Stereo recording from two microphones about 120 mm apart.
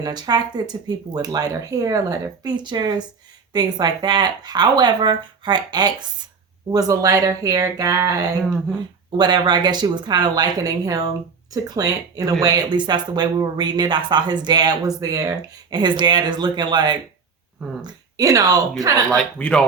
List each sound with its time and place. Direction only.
0.0 s speech: 35° right (ahead or behind)
19.1 s speech: 10° left (ahead or behind)